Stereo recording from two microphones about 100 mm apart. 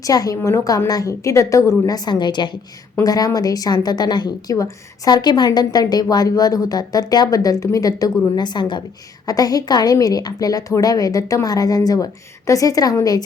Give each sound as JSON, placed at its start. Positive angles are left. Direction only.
{"t": 0.0, "sound": "a woman's voice", "side_deg": 35}
{"t": 3.0, "sound": "a woman's voice", "side_deg": 40}